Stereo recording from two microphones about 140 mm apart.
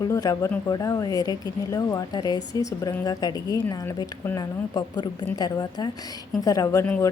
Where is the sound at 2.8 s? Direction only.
15° left (ahead or behind).